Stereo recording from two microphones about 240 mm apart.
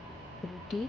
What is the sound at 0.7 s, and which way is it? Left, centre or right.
Speech, centre.